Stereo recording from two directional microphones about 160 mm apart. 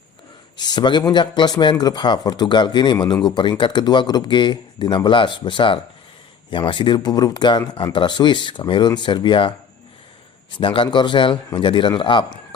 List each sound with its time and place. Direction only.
0.5 s speech: 25° left (ahead or behind)
10.6 s a man's voice: 30° left (ahead or behind)